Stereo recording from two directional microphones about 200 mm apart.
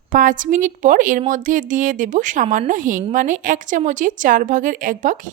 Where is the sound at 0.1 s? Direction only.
40° right (ahead or behind).